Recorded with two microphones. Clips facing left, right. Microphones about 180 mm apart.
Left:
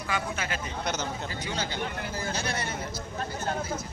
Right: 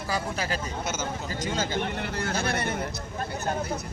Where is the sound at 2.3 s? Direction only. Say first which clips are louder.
Right 6 dB; 55° right (ahead or behind).